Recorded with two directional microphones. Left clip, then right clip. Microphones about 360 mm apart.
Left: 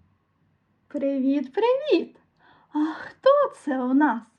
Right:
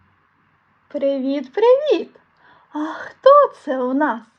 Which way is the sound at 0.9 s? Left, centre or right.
Left.